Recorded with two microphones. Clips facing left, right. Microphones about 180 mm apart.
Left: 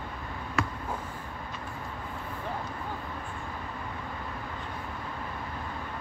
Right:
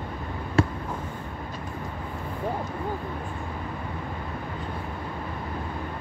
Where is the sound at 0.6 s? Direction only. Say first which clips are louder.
Right 8 dB; 30° right (ahead or behind).